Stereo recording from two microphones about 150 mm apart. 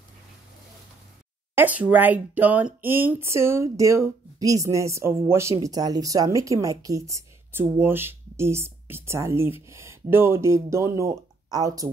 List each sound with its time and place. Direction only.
1.5 s speech: 10° right (ahead or behind)